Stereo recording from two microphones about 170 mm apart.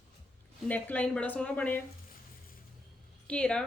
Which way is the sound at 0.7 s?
10° left (ahead or behind).